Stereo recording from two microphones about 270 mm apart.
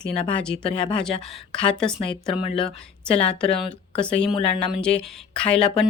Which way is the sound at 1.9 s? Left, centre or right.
Centre.